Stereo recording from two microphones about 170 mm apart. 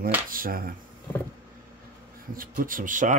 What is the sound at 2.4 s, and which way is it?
Speech, 55° right (ahead or behind).